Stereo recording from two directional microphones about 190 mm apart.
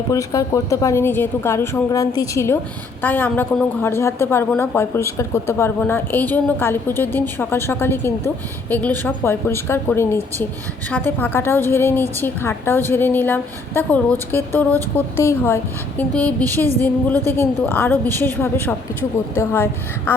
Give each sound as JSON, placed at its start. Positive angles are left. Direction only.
{"t": 0.1, "sound": "a woman's voice", "side_deg": 15}